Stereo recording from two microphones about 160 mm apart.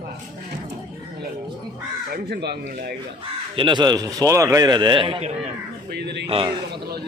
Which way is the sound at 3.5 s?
30° right (ahead or behind).